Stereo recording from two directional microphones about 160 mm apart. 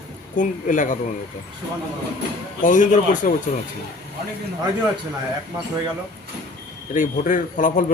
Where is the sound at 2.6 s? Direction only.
55° left (ahead or behind).